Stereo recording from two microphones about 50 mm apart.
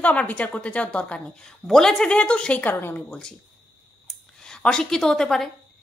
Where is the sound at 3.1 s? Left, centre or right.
Centre.